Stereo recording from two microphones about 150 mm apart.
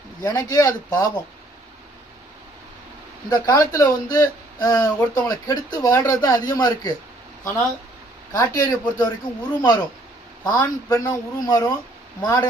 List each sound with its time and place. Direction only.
0.2 s speech: 25° left (ahead or behind)
3.2 s speech: 25° left (ahead or behind)
8.3 s speech: 25° left (ahead or behind)